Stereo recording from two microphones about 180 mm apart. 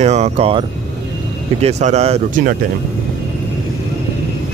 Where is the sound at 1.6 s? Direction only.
40° right (ahead or behind).